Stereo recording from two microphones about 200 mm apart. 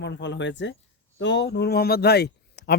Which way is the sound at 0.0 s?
60° left (ahead or behind).